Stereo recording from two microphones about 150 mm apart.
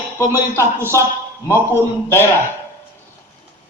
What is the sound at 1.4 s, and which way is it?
Speech, 15° left (ahead or behind).